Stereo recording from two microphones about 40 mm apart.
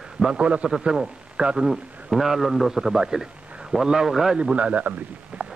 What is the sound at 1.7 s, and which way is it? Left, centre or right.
A man's voice, centre.